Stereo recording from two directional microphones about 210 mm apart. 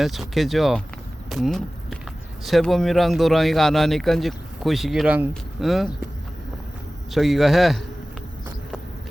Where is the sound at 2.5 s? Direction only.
Centre (ahead or behind).